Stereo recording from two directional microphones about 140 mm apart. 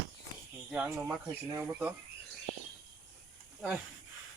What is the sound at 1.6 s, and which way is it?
Speech, 10° right (ahead or behind).